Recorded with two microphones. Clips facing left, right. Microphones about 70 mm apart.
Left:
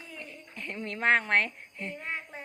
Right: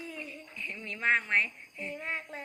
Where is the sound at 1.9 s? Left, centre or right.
Centre.